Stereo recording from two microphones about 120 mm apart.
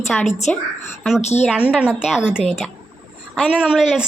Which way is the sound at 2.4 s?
5° left (ahead or behind).